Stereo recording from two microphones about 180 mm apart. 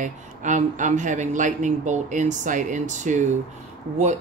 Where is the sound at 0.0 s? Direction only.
45° right (ahead or behind).